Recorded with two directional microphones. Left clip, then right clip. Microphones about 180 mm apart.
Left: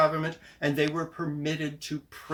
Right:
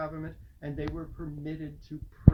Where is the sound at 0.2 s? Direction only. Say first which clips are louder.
Left 12 dB; 25° left (ahead or behind).